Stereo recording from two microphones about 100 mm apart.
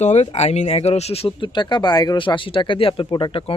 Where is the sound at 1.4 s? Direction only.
50° left (ahead or behind).